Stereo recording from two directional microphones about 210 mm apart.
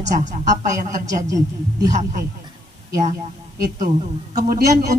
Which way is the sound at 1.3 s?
15° right (ahead or behind).